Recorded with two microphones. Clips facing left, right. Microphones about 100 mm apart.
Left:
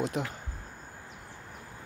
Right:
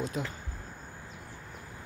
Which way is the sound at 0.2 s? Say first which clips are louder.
Left 2 dB; 60° left (ahead or behind).